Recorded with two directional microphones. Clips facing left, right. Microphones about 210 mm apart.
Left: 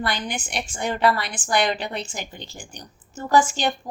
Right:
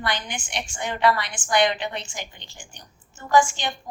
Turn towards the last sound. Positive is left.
turn(degrees=35)  # may be behind; listen again after turning